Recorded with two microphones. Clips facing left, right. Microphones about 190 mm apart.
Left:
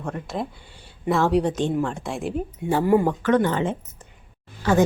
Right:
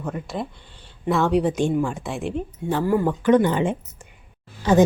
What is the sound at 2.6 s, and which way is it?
Speech, 15° left (ahead or behind).